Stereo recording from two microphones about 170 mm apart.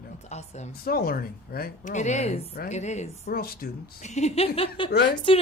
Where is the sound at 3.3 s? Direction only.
60° left (ahead or behind).